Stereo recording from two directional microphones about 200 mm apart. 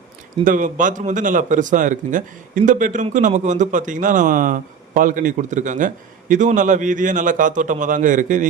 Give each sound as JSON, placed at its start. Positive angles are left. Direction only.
{"t": 0.4, "sound": "a man's voice", "side_deg": -40}